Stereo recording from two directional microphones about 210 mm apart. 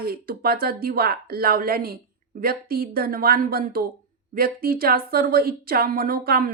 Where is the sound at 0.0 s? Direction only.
45° right (ahead or behind).